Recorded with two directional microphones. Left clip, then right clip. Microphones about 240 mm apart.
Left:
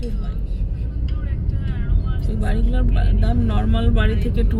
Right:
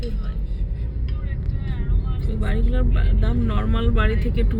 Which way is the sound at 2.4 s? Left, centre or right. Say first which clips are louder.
Left 1 dB; centre.